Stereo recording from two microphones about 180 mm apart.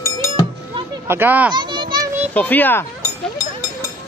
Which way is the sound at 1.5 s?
25° right (ahead or behind).